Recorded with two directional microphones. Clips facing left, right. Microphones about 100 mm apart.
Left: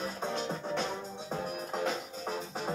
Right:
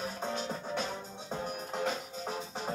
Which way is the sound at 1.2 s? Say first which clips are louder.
Left 1 dB; 5° left (ahead or behind).